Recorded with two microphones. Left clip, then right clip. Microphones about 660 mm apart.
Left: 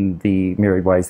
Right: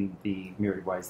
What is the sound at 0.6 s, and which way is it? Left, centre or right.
Speech, left.